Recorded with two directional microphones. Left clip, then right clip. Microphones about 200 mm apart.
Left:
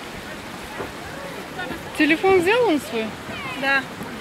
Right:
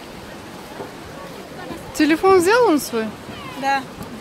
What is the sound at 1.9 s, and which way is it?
Speech, 25° right (ahead or behind).